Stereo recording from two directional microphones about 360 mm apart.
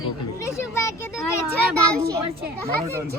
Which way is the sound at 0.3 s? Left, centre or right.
Centre.